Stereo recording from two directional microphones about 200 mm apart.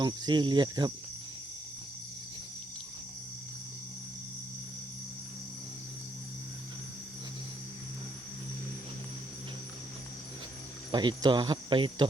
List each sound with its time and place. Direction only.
0.0 s speech: 20° right (ahead or behind)
10.9 s speech: 25° right (ahead or behind)